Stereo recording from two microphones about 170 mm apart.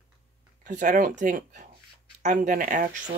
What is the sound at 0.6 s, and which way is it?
Speech, 50° right (ahead or behind).